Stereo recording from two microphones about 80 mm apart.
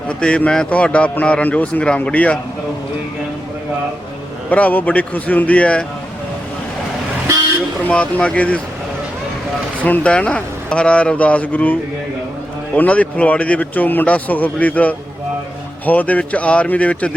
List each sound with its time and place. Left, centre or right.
0.1 s speech: centre
4.4 s speech: centre
7.9 s speech: centre
9.8 s a man's voice: centre